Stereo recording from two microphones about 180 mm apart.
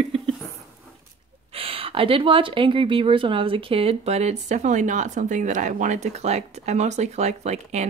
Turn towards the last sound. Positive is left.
turn(degrees=-40)  # may be behind; listen again after turning